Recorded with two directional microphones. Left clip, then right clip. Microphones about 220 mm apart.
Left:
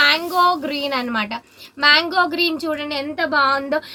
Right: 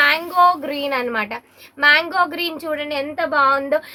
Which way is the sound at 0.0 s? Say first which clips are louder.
Right 1 dB; 40° right (ahead or behind).